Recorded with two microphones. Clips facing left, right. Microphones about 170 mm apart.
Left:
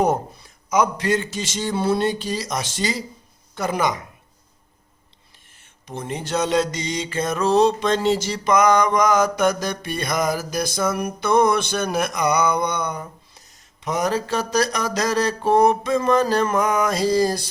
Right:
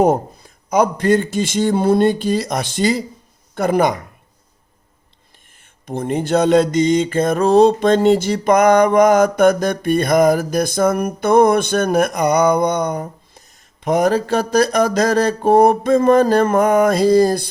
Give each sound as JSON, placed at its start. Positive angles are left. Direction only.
{"t": 0.7, "sound": "mantra", "side_deg": -50}
{"t": 3.5, "sound": "speech", "side_deg": -55}
{"t": 5.8, "sound": "mantra", "side_deg": -55}